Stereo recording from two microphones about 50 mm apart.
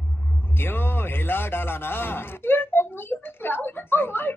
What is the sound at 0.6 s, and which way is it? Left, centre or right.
A woman's voice, left.